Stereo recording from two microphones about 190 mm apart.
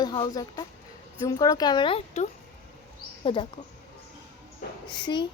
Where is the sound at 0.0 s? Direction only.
20° left (ahead or behind).